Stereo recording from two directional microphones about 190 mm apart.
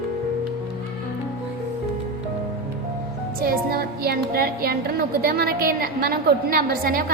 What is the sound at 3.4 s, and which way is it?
A woman's voice, 50° right (ahead or behind).